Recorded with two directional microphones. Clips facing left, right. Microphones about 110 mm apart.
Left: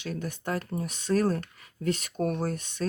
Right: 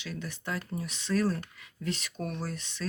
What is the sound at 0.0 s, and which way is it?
Speech, 45° left (ahead or behind).